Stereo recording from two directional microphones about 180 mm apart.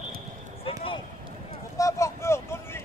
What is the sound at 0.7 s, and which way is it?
Run, 30° left (ahead or behind).